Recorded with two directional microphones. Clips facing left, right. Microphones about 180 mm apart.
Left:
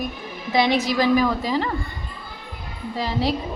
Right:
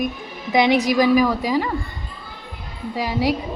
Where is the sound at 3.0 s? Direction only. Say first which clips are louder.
Right 2 dB; 15° right (ahead or behind).